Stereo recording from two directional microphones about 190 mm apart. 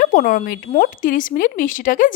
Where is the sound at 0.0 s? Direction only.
50° left (ahead or behind).